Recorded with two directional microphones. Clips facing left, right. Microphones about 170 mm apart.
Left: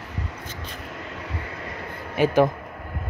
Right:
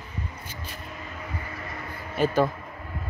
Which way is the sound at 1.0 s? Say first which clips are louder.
Left 2 dB; 75° left (ahead or behind).